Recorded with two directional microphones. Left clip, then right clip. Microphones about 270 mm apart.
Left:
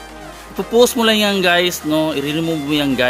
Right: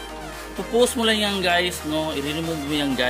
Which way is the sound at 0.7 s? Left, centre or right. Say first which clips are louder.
Left 7 dB; left.